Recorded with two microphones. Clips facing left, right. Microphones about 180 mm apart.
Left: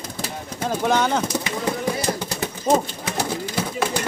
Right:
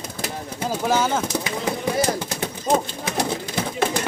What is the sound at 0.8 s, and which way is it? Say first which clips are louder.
Speech: left 1 dB; 5° right (ahead or behind).